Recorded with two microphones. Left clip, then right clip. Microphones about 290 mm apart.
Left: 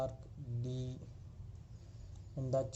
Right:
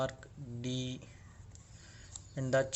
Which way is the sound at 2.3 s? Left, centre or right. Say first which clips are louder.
Right 5 dB; right.